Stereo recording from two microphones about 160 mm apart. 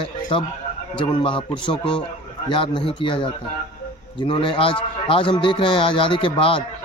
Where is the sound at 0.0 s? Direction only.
30° left (ahead or behind).